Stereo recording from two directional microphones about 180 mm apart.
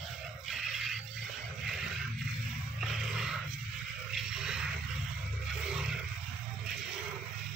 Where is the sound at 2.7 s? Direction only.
Centre (ahead or behind).